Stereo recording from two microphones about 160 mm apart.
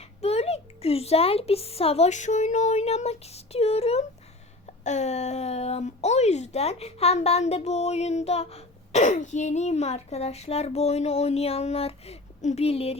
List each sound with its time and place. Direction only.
0.2 s a child's voice: 40° left (ahead or behind)